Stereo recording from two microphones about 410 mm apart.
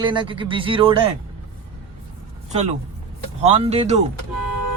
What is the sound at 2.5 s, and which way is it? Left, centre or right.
Speech, centre.